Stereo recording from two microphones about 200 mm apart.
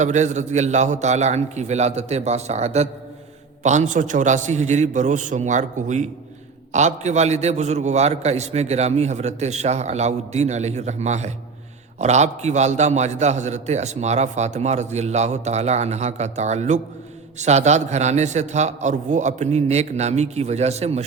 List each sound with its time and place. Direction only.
0.0 s a man's voice: 35° right (ahead or behind)